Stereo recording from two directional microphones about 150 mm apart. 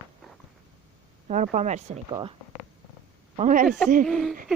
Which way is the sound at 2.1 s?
30° right (ahead or behind).